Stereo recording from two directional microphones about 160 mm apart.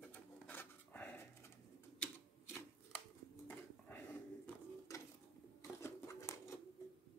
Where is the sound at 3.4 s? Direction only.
10° left (ahead or behind).